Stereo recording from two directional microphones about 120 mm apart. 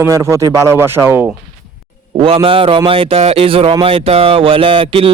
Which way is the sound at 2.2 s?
50° right (ahead or behind).